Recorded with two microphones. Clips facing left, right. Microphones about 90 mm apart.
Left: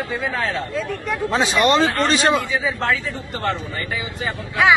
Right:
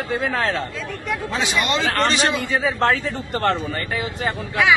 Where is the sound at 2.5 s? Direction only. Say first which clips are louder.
Right 2 dB; 50° right (ahead or behind).